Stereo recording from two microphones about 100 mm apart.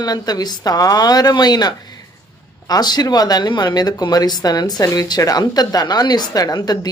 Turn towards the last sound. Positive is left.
turn(degrees=40)  # may be behind; listen again after turning